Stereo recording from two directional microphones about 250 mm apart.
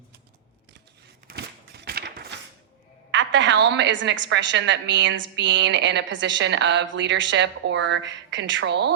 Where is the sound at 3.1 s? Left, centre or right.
Right.